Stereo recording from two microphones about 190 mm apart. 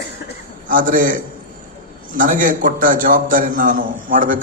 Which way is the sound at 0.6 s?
45° right (ahead or behind).